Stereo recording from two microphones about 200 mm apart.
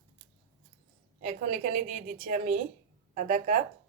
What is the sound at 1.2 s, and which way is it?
A woman's voice, 40° right (ahead or behind).